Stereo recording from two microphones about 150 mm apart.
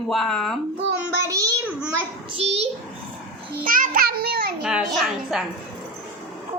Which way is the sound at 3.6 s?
65° right (ahead or behind).